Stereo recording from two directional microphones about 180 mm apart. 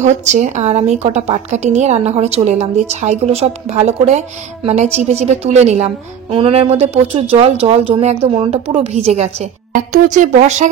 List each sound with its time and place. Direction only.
0.0 s a woman's voice: 40° right (ahead or behind)